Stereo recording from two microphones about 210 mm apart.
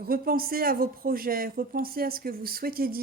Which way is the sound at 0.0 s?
45° right (ahead or behind).